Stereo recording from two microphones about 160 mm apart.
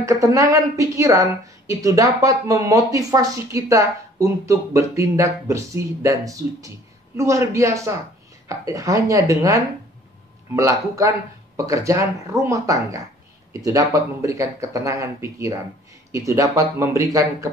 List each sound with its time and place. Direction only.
0.0 s a woman's voice: 20° right (ahead or behind)